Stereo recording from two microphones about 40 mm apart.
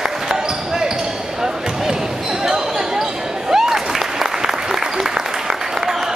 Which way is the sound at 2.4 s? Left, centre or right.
Centre.